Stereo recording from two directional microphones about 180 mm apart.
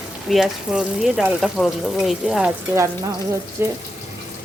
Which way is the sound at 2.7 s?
15° right (ahead or behind).